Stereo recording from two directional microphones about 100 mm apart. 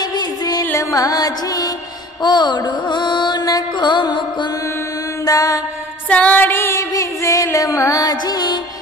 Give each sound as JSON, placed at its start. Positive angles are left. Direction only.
{"t": 0.7, "sound": "music", "side_deg": 40}
{"t": 5.2, "sound": "mantra", "side_deg": 35}
{"t": 6.0, "sound": "music", "side_deg": 15}